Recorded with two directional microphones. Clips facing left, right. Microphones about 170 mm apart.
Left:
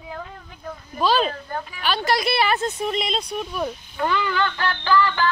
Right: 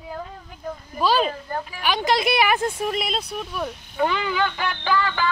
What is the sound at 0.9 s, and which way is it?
Speech, 10° right (ahead or behind).